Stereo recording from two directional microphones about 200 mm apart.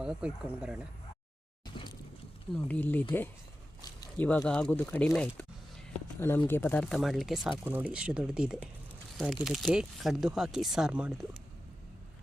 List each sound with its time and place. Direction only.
0.0 s speech: 5° right (ahead or behind)
1.6 s a sound: 20° left (ahead or behind)
2.5 s speech: 5° left (ahead or behind)